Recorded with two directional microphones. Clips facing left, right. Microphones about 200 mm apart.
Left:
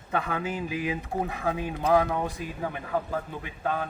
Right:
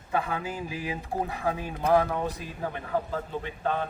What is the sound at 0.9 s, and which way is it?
Chant, 30° right (ahead or behind).